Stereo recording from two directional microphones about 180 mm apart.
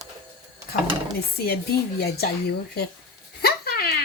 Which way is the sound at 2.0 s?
60° left (ahead or behind).